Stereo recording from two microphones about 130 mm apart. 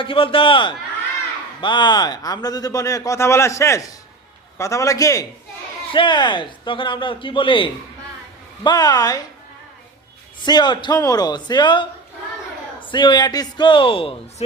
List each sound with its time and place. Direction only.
0.0 s a man's voice: 45° left (ahead or behind); by 5.2 s 25° left (ahead or behind)
5.9 s speech: 40° left (ahead or behind)
10.4 s speech: 35° left (ahead or behind)
12.9 s speech: 35° left (ahead or behind)